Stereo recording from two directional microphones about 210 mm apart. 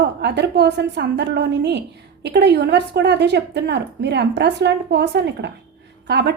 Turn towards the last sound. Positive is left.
turn(degrees=-55)  # may be behind; listen again after turning